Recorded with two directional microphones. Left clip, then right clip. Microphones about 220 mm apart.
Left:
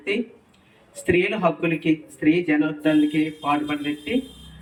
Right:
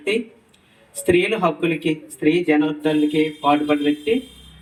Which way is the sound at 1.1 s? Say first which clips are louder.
Right 3 dB; 25° right (ahead or behind).